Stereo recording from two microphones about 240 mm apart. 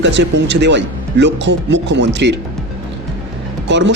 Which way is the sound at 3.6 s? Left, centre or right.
Right.